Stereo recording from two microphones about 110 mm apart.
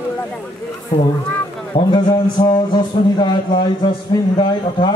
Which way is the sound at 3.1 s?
45° left (ahead or behind).